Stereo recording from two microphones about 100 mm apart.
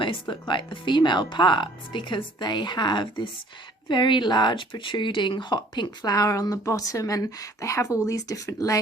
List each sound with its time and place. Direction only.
0.0 s speech: 55° left (ahead or behind); by 8.8 s 35° left (ahead or behind)